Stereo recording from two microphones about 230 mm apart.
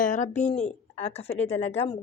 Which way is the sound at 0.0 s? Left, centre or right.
Left.